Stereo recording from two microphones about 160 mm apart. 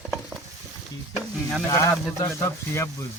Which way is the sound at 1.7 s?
15° left (ahead or behind).